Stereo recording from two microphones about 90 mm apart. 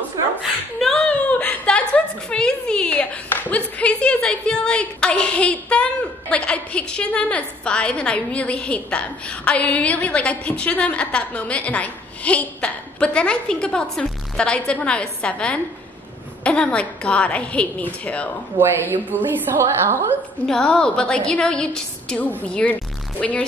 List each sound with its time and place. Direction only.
0.4 s a woman's voice: 5° left (ahead or behind)
18.6 s a woman's voice: 20° right (ahead or behind)
20.4 s a woman's voice: 5° left (ahead or behind)